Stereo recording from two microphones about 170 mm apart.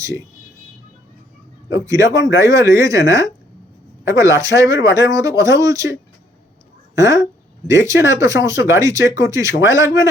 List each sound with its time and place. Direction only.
1.7 s speech: 20° right (ahead or behind)